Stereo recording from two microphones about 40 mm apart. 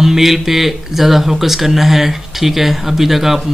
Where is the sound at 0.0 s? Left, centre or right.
Centre.